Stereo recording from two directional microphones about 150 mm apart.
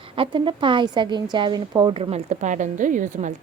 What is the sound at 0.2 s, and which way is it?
A woman's voice, 35° right (ahead or behind).